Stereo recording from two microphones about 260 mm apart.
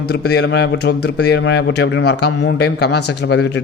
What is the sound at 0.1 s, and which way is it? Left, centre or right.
A man's voice, left.